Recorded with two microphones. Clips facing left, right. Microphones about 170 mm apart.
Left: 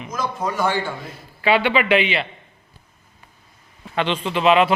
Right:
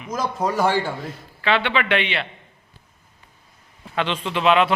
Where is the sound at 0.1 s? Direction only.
35° right (ahead or behind).